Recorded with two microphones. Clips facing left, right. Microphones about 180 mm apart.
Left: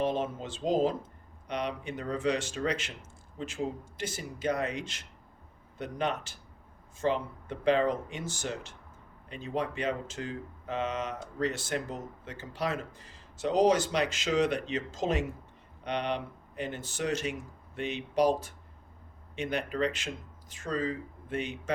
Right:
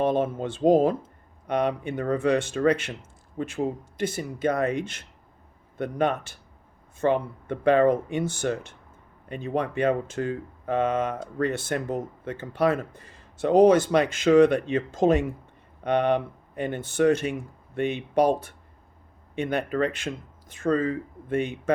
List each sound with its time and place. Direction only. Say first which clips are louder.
0.0 s speech: right 7 dB; 55° right (ahead or behind)